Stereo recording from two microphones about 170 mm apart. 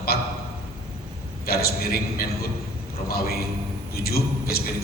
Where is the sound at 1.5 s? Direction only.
65° left (ahead or behind).